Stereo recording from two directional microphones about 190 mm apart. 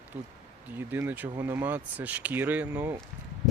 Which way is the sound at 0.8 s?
10° right (ahead or behind).